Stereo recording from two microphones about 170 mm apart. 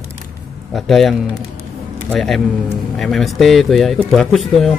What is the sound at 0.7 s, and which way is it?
Speech, centre (ahead or behind).